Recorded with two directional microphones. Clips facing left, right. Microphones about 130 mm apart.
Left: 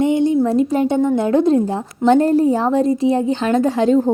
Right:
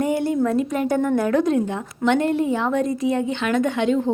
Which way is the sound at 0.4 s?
30° left (ahead or behind).